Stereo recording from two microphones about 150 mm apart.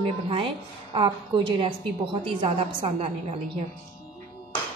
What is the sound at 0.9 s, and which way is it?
A woman's voice, 35° right (ahead or behind).